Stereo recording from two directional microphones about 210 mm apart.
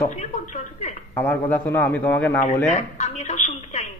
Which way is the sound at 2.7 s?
35° left (ahead or behind).